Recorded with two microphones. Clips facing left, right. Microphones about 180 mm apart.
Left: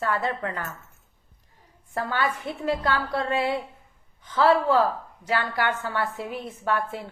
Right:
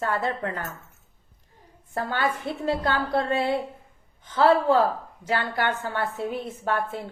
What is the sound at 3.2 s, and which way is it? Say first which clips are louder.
Speech: right 3 dB; 40° right (ahead or behind).